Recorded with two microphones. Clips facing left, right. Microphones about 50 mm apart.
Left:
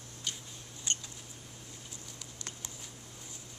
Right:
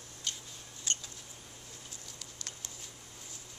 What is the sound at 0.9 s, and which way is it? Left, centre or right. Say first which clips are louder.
Mouse: left 1 dB; centre.